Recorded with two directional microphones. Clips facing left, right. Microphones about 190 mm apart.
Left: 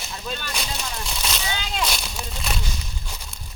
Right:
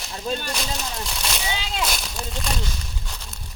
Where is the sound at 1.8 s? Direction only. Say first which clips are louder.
Even; centre (ahead or behind).